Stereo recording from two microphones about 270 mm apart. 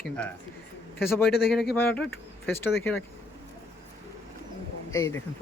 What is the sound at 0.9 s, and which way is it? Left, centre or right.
Speech, left.